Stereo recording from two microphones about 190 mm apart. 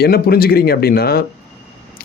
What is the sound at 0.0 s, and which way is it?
Speech, 55° left (ahead or behind).